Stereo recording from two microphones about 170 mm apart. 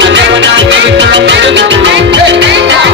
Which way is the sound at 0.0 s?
90° right.